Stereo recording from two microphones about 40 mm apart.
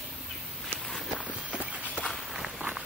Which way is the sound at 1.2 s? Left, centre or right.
Right.